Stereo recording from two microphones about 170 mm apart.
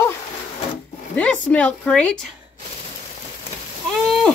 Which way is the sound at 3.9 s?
5° left (ahead or behind).